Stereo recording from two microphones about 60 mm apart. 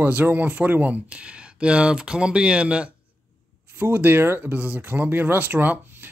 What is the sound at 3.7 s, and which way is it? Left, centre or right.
Speech, right.